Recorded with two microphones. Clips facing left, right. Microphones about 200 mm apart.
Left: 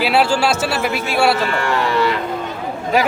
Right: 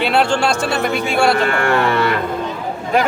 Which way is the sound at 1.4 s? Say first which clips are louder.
Right 3 dB; 55° right (ahead or behind).